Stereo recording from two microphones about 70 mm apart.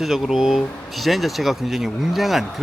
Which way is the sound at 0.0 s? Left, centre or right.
Centre.